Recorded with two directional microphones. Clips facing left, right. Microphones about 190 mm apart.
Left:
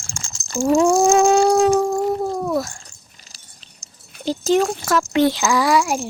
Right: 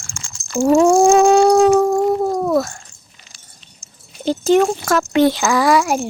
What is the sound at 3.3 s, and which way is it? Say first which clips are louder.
Cat: right 1 dB; 35° left (ahead or behind).